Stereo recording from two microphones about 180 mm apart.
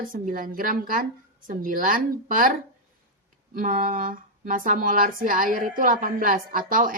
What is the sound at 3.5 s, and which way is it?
Speech, 50° right (ahead or behind).